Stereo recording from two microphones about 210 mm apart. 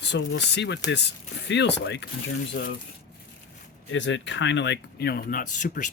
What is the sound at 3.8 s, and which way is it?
Speech, 60° left (ahead or behind).